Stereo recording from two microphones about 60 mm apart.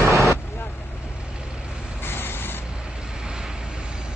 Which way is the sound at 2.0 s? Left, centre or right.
Left.